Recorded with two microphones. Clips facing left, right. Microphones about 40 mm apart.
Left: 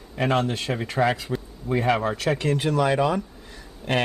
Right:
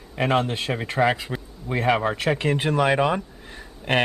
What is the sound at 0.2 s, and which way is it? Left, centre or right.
Speech, centre.